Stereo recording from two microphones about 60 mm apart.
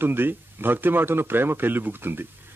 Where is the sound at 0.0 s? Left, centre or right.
Right.